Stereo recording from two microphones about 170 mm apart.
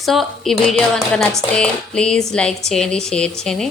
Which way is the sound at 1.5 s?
5° left (ahead or behind).